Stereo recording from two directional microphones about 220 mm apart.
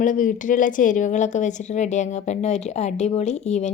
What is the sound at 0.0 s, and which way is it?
A woman's voice, 35° left (ahead or behind).